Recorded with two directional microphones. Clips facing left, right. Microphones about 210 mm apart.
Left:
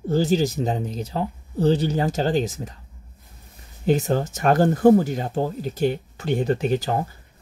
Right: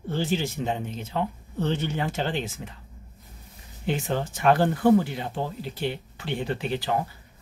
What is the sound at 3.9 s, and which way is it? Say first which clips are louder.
Speech: left 7 dB; 40° left (ahead or behind).